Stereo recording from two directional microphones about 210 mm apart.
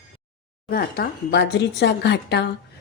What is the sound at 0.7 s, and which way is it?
Speech, 45° left (ahead or behind).